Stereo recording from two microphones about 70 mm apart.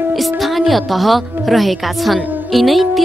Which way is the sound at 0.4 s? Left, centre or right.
Centre.